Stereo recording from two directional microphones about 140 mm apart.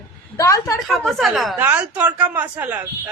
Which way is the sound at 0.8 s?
Centre (ahead or behind).